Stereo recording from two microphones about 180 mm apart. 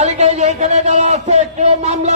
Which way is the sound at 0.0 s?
40° right (ahead or behind).